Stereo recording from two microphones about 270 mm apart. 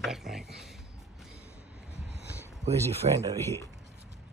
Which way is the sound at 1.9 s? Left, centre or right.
Right.